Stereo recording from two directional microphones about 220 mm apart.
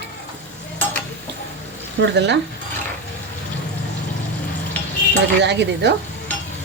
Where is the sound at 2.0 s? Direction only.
50° right (ahead or behind).